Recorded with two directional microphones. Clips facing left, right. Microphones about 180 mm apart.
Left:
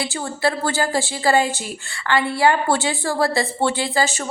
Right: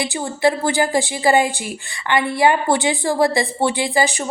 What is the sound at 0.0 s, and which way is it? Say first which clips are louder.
A woman's voice: right 4 dB; 15° right (ahead or behind).